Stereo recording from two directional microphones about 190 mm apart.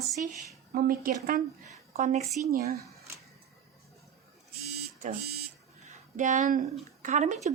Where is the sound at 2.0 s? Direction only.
35° right (ahead or behind).